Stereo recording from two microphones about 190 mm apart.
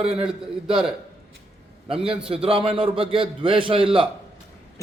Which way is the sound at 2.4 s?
30° right (ahead or behind).